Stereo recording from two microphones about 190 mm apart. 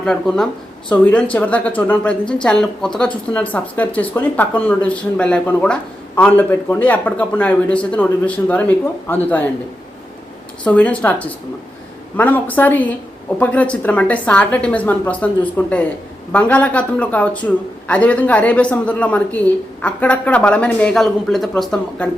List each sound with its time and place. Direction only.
0.0 s speech: 5° left (ahead or behind)
10.6 s speech: 5° left (ahead or behind)